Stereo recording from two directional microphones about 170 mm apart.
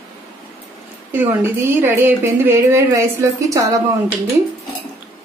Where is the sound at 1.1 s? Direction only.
10° right (ahead or behind).